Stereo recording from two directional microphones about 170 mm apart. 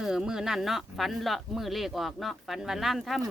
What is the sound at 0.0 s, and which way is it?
Speech, 5° right (ahead or behind).